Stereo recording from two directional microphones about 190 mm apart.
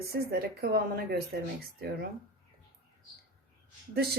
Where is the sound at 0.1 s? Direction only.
55° right (ahead or behind).